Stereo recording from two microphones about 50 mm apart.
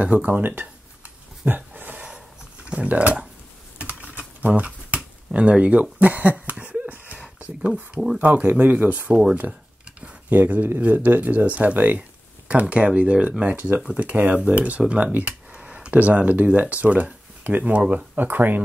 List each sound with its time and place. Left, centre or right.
0.0 s speech: right
0.3 s speech: right
1.4 s a sound: right
2.6 s speech: right
3.7 s computer keyboard: right
6.6 s a sound: right
7.3 s speech: right
8.2 s speech: right
9.3 s a sound: right
10.3 s speech: right
15.1 s a sound: right
15.9 s speech: right